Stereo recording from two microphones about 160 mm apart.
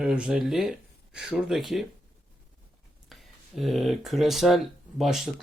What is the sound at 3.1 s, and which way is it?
Speech, centre (ahead or behind).